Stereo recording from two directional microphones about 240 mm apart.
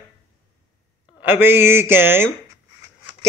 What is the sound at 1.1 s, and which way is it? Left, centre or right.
Speech, centre.